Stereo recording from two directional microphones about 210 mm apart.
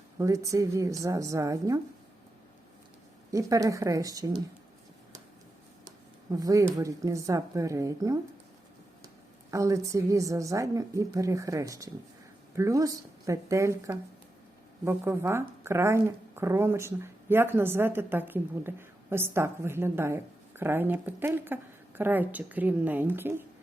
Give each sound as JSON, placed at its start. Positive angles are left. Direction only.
{"t": 0.2, "sound": "a woman's voice", "side_deg": -15}
{"t": 3.3, "sound": "a woman's voice", "side_deg": -15}
{"t": 6.3, "sound": "a woman's voice", "side_deg": -15}
{"t": 9.5, "sound": "a woman's voice", "side_deg": -15}